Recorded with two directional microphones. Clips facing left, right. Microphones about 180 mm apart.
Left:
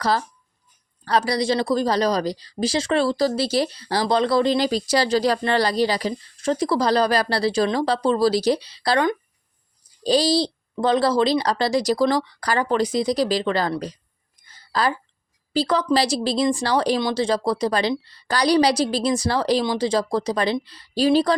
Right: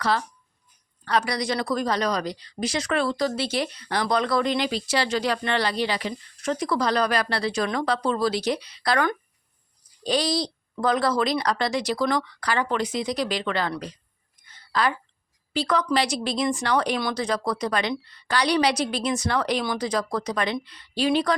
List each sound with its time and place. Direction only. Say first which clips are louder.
0.0 s speech: left 3 dB; 35° left (ahead or behind)
14.4 s a sound: left 2 dB; 35° left (ahead or behind)
15.5 s speech: left 3 dB; 30° left (ahead or behind)